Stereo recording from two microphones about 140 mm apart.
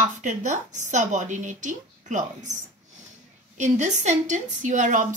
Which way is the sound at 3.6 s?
60° right (ahead or behind).